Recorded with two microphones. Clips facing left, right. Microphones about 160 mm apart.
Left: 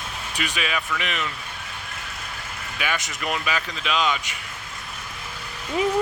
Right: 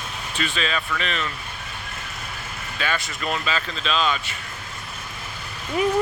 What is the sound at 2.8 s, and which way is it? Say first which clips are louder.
Speech: right 1 dB; 15° left (ahead or behind).